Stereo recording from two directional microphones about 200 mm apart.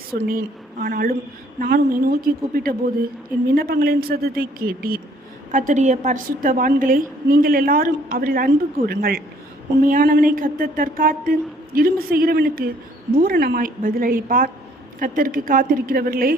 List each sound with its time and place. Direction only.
0.1 s a woman's voice: 45° right (ahead or behind)